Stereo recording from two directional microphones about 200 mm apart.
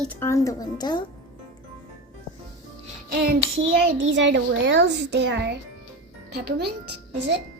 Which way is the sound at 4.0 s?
65° right (ahead or behind).